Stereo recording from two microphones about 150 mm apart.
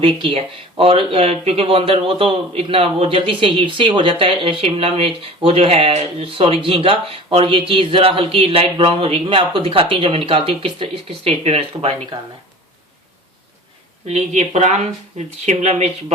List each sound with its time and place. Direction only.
0.0 s speech: 35° right (ahead or behind)
14.1 s speech: 50° right (ahead or behind)